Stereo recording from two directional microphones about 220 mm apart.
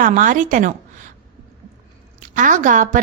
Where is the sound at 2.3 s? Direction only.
35° right (ahead or behind).